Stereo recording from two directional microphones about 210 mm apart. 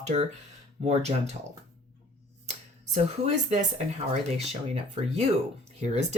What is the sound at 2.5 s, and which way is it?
Speech, 35° right (ahead or behind).